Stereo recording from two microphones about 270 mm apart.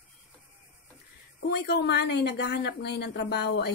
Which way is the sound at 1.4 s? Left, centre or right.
Left.